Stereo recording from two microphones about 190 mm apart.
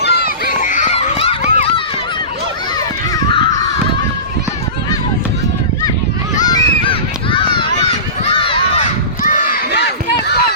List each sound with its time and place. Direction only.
0.0 s a sound: 55° left (ahead or behind)
0.6 s children playing: 40° left (ahead or behind)
6.4 s honk: 20° left (ahead or behind)
9.2 s crowd: 45° left (ahead or behind)